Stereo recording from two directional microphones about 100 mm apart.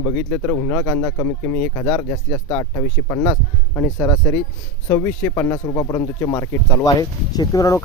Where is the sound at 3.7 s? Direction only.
25° left (ahead or behind).